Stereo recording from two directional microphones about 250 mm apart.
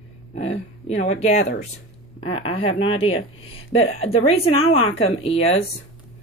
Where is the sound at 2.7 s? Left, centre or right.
Left.